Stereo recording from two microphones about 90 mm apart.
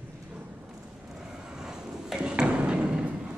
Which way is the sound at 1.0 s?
5° right (ahead or behind).